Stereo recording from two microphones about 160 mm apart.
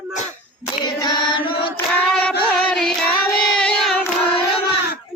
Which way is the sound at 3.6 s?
5° left (ahead or behind).